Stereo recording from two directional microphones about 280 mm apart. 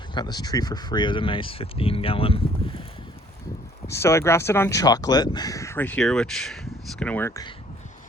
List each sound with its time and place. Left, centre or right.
0.1 s speech: centre
3.8 s speech: centre